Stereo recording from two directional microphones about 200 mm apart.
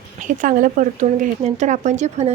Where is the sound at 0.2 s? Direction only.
40° right (ahead or behind).